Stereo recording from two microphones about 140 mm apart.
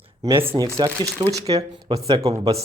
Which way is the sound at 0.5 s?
25° right (ahead or behind).